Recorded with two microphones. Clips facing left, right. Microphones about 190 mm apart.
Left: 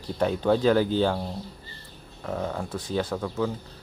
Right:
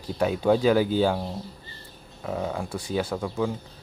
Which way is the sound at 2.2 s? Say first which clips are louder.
Right 1 dB; 5° right (ahead or behind).